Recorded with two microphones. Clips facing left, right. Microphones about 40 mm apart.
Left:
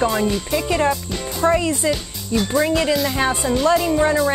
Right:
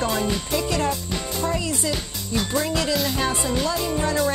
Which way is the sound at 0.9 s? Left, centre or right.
Left.